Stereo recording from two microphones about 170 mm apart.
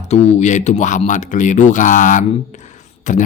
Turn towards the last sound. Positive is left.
turn(degrees=45)  # may be behind; listen again after turning